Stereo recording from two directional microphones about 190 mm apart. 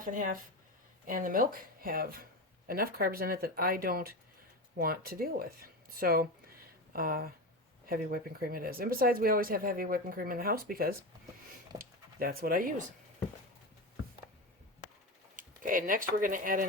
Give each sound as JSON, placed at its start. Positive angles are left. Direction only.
{"t": 0.0, "sound": "speech", "side_deg": -45}
{"t": 15.4, "sound": "speech", "side_deg": -45}